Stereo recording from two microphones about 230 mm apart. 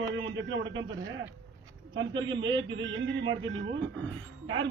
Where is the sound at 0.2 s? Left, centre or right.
Right.